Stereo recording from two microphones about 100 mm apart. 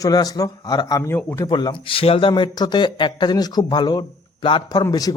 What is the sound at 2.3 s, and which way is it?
Speech, 45° left (ahead or behind).